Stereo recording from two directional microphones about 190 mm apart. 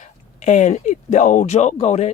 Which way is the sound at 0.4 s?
40° left (ahead or behind).